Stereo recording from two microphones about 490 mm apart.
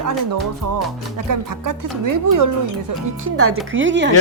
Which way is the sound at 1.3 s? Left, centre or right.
Right.